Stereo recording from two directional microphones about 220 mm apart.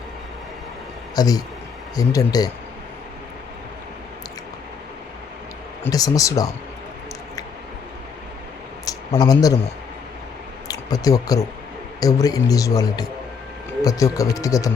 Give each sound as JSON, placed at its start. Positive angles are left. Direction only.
{"t": 1.1, "sound": "a man's voice", "side_deg": 15}
{"t": 5.8, "sound": "a man's voice", "side_deg": 15}
{"t": 8.8, "sound": "a sound", "side_deg": 15}
{"t": 10.7, "sound": "a man's voice", "side_deg": 15}